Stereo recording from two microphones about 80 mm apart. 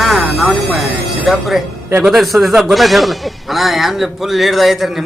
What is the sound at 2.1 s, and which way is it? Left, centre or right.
A man's voice, centre.